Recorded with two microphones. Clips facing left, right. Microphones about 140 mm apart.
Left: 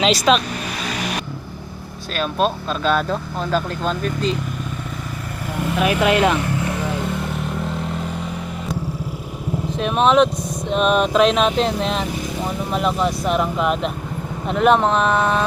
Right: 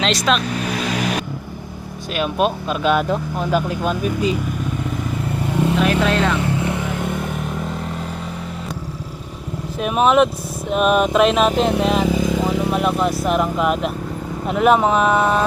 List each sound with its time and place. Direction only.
0.0 s speech: centre (ahead or behind)
2.1 s speech: 15° right (ahead or behind)
5.8 s speech: 10° left (ahead or behind)
6.6 s vehicle: 20° right (ahead or behind)
9.8 s speech: 5° right (ahead or behind)